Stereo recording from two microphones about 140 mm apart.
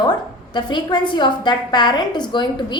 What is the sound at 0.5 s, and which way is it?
A woman's voice, 30° left (ahead or behind).